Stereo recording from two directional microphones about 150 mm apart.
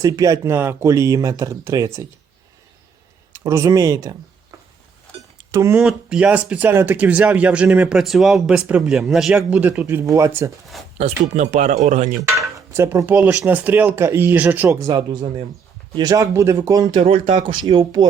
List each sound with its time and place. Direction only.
0.0 s speech: 20° right (ahead or behind)
3.3 s speech: 20° right (ahead or behind)
5.5 s speech: 20° right (ahead or behind)
5.8 s speech: 5° right (ahead or behind)
10.9 s speech: 50° right (ahead or behind)
12.5 s cutlery: 15° right (ahead or behind)
13.1 s speech: 10° right (ahead or behind); by 15.4 s 35° right (ahead or behind)
16.0 s speech: 25° right (ahead or behind)